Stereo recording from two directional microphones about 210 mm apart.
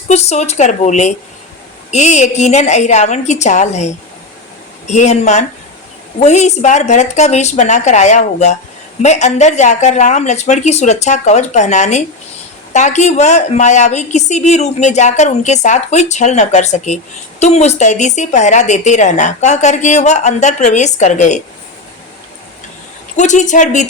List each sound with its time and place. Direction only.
0.1 s a woman's voice: 30° left (ahead or behind)
23.1 s a woman's voice: 35° left (ahead or behind)